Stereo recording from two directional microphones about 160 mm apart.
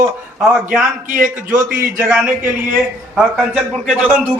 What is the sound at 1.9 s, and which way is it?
A man's voice, 15° right (ahead or behind).